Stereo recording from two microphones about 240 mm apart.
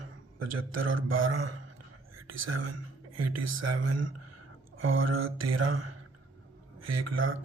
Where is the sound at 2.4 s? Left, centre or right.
Right.